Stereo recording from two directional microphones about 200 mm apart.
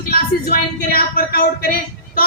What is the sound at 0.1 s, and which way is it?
A woman's voice, 50° left (ahead or behind).